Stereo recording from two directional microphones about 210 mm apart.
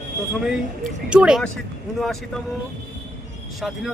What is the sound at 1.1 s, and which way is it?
Speech, 5° right (ahead or behind).